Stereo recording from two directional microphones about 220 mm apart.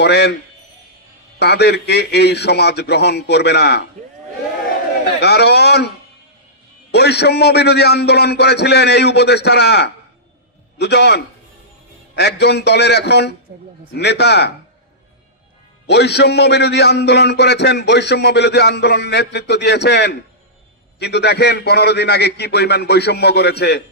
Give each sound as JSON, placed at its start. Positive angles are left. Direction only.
{"t": 0.0, "sound": "speech", "side_deg": 50}
{"t": 1.4, "sound": "speech", "side_deg": 50}
{"t": 5.2, "sound": "a sound", "side_deg": 50}
{"t": 6.9, "sound": "a man's voice", "side_deg": 50}
{"t": 15.9, "sound": "speech", "side_deg": 50}